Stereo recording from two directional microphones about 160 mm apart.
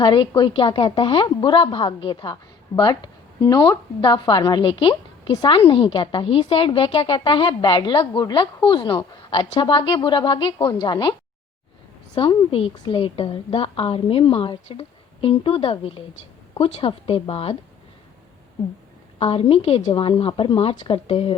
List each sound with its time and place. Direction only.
0.0 s a woman's voice: 30° left (ahead or behind)
12.3 s a woman's voice: 35° left (ahead or behind)
19.2 s a woman's voice: 35° left (ahead or behind)